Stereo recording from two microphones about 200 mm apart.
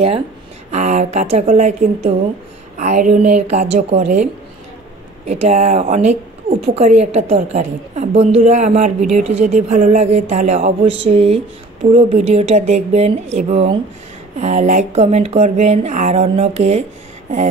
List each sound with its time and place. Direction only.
0.7 s speech: 35° right (ahead or behind)
5.2 s speech: 30° right (ahead or behind)